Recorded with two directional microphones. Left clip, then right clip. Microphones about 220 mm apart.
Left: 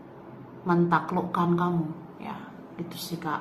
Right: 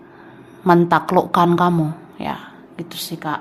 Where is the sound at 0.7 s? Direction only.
55° right (ahead or behind).